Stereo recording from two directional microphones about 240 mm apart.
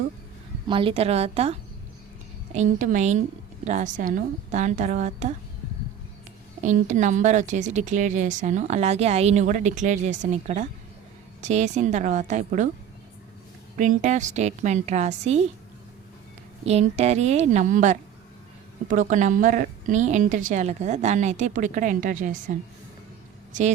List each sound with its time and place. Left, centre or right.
0.7 s a woman's voice: right
2.6 s a woman's voice: right
6.6 s a woman's voice: right
13.7 s a woman's voice: right
16.6 s a woman's voice: right